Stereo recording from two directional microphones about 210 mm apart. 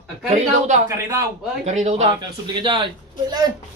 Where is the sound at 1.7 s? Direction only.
30° right (ahead or behind).